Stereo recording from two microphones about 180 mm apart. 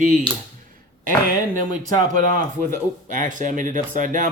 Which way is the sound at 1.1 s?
50° right (ahead or behind).